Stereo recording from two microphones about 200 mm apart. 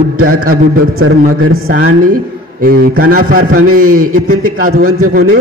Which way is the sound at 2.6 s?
45° right (ahead or behind).